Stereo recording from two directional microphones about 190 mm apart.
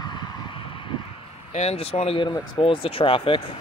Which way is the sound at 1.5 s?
35° left (ahead or behind).